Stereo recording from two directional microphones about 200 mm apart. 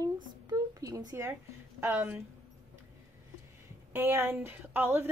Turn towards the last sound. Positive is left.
turn(degrees=-10)  # may be behind; listen again after turning